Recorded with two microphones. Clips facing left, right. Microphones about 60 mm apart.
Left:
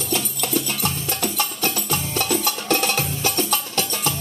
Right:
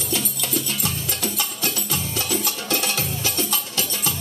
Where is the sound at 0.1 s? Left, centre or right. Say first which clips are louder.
Left 3 dB; left.